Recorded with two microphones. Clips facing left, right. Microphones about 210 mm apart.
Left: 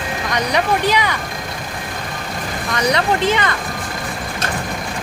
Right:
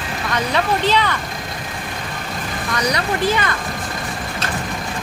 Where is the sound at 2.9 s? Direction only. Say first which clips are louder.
Left 3 dB; 20° left (ahead or behind).